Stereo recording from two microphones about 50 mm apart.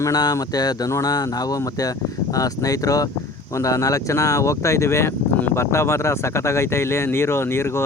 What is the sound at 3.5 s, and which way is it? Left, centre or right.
Speech, left.